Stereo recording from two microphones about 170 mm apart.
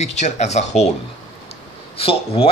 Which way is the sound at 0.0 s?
40° left (ahead or behind).